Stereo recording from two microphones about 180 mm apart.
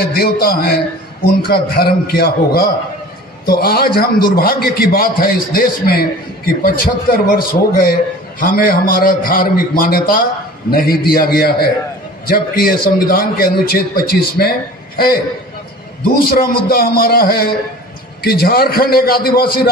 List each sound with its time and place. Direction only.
0.0 s a man's voice: 55° left (ahead or behind)
16.1 s a man's voice: 55° left (ahead or behind)